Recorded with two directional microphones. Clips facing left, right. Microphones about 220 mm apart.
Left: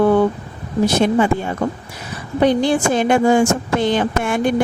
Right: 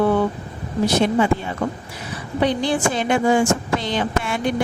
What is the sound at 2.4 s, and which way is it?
Speech, 45° left (ahead or behind).